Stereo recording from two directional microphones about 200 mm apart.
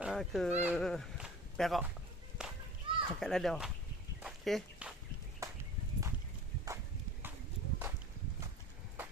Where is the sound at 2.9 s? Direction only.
25° right (ahead or behind).